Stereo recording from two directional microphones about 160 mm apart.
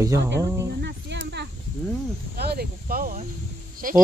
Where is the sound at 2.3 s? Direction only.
85° right; by 3.2 s 65° right (ahead or behind).